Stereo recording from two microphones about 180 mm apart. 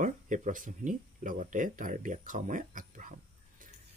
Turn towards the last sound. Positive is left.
turn(degrees=-45)  # may be behind; listen again after turning